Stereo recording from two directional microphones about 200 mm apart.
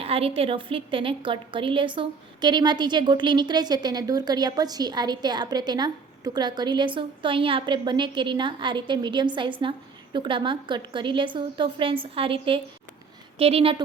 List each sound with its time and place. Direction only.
0.0 s a woman's voice: 30° right (ahead or behind)